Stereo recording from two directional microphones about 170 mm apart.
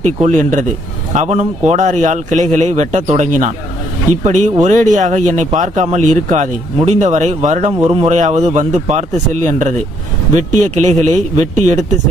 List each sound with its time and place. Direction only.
0.0 s speech: 45° right (ahead or behind)